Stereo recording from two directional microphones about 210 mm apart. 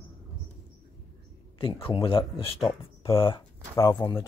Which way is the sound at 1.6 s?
25° left (ahead or behind).